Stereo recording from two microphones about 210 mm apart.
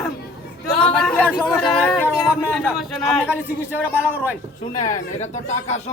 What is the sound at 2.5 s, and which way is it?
A man's voice, centre (ahead or behind).